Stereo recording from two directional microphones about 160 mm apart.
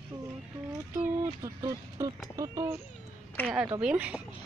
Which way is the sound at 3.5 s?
10° right (ahead or behind).